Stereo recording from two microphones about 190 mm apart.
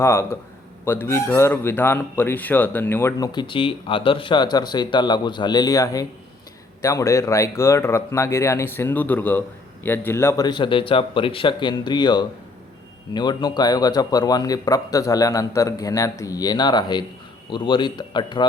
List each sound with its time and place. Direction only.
0.0 s speech: 15° left (ahead or behind)
3.3 s a man's voice: 25° left (ahead or behind)